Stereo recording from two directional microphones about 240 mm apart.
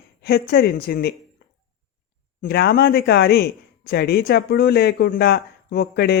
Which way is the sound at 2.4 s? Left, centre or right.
Left.